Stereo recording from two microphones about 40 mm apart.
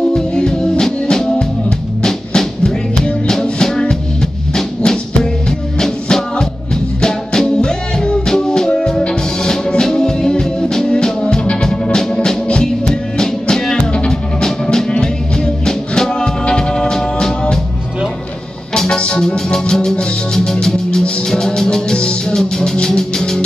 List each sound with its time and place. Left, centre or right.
0.1 s music: centre
11.6 s organ: centre
12.1 s music: left
18.8 s music: left